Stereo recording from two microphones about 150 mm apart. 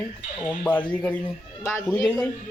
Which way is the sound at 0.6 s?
10° left (ahead or behind).